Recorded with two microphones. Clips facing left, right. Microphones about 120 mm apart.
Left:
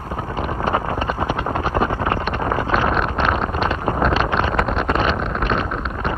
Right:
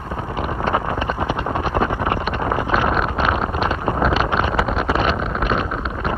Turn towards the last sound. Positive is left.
turn(degrees=-5)  # may be behind; listen again after turning